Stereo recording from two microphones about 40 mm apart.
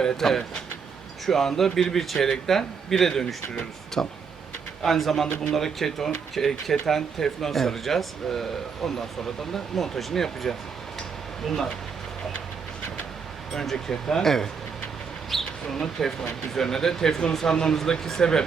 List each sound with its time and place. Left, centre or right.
0.0 s speech: centre
4.0 s speech: left
4.8 s speech: centre
13.5 s speech: centre